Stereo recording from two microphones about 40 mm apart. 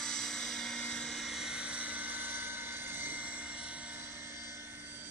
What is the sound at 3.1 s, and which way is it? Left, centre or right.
Helicopter, right.